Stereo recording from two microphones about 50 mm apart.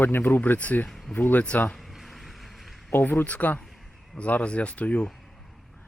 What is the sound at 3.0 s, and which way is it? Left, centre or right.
Speech, left.